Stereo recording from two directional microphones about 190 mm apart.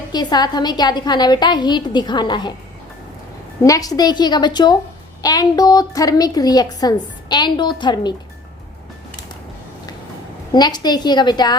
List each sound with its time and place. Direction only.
0.1 s a woman's voice: 20° left (ahead or behind)
3.6 s a woman's voice: 20° left (ahead or behind)
10.5 s a woman's voice: 20° left (ahead or behind)